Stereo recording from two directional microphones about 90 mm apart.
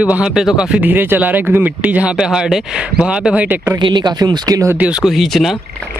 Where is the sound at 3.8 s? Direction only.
55° right (ahead or behind).